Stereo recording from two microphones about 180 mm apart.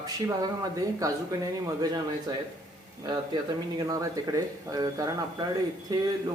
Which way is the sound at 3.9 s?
20° right (ahead or behind).